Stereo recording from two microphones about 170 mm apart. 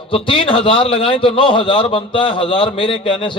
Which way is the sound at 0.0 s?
30° left (ahead or behind).